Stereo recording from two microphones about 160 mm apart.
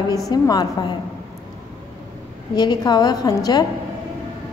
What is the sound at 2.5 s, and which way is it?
A woman's voice, 25° left (ahead or behind).